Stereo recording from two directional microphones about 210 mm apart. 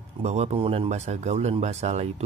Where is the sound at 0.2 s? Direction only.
30° right (ahead or behind).